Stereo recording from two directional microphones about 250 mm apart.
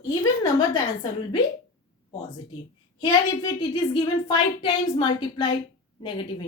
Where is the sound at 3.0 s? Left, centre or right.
Centre.